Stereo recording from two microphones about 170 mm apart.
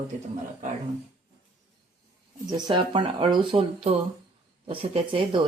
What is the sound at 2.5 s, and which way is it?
Speech, 25° right (ahead or behind).